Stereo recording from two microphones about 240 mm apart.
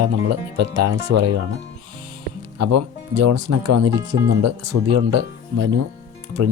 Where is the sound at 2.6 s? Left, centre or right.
Right.